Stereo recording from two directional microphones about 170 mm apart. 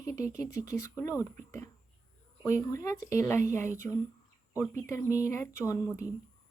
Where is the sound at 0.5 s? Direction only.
20° left (ahead or behind).